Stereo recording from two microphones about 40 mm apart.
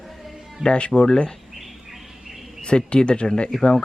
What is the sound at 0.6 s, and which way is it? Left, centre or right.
Speech, left.